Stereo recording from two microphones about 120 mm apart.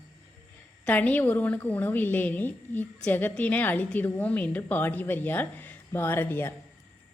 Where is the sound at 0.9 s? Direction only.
10° left (ahead or behind).